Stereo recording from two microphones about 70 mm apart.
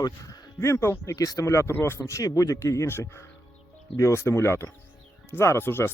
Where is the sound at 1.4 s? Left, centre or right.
Left.